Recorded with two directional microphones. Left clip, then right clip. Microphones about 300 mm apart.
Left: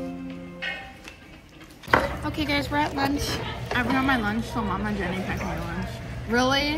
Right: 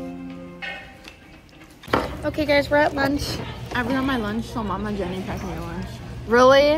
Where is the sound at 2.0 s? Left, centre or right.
Centre.